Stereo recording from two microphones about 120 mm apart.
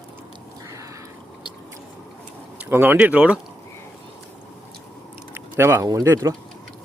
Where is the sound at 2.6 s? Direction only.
15° right (ahead or behind).